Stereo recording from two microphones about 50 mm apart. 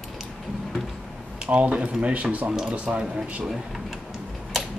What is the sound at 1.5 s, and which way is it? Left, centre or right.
Speech, right.